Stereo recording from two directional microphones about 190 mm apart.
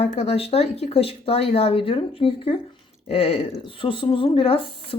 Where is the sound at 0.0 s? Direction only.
35° left (ahead or behind).